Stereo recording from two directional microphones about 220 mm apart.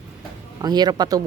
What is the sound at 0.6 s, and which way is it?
Speech, 20° right (ahead or behind).